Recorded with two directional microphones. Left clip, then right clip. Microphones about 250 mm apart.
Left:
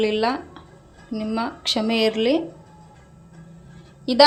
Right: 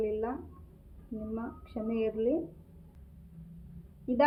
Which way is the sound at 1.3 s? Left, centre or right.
Left.